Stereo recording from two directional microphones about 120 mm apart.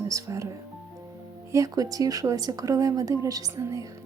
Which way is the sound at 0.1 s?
25° right (ahead or behind).